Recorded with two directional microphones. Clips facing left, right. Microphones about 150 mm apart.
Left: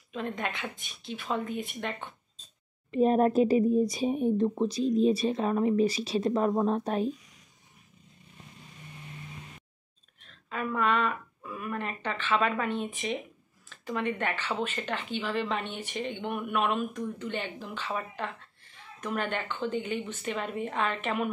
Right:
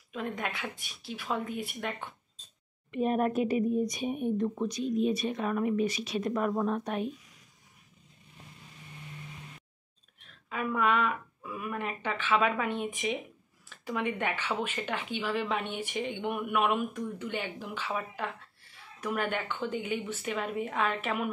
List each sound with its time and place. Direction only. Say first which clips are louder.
0.1 s speech: left 1 dB; 5° right (ahead or behind)
2.9 s speech: left 5 dB; 35° left (ahead or behind)
10.3 s a woman's voice: even; 10° right (ahead or behind)